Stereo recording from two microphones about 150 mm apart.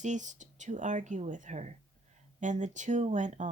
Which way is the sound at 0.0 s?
55° right (ahead or behind).